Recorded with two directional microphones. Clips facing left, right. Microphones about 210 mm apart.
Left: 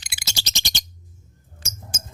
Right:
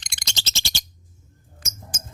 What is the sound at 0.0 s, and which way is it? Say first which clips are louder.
Bird: left 1 dB; 5° left (ahead or behind).